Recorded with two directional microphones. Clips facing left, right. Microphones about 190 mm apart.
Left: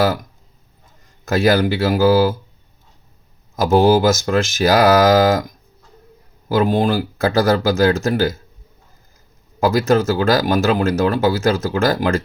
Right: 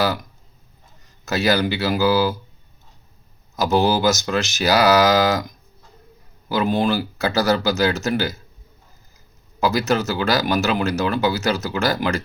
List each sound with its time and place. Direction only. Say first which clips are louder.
1.2 s speech: left 4 dB; 50° left (ahead or behind)
3.5 s speech: left 5 dB; 50° left (ahead or behind)
6.5 s speech: left 3 dB; 50° left (ahead or behind)
9.6 s speech: left 5 dB; 50° left (ahead or behind)